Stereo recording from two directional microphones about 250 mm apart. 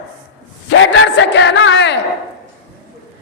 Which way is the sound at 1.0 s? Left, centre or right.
Left.